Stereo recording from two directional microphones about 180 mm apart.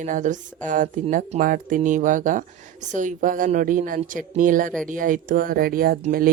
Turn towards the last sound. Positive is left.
turn(degrees=-55)  # may be behind; listen again after turning